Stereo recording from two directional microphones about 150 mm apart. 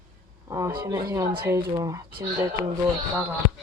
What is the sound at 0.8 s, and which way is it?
Speech, 20° right (ahead or behind).